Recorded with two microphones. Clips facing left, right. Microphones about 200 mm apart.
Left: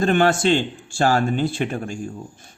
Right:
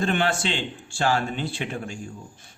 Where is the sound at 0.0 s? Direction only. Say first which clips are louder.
Left 7 dB; 45° left (ahead or behind).